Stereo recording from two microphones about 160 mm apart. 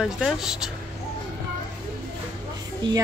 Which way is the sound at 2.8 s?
30° right (ahead or behind).